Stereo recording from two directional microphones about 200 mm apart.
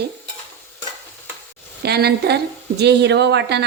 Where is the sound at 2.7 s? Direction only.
60° right (ahead or behind).